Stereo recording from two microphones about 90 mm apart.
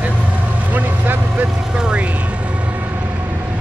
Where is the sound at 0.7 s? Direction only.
20° right (ahead or behind).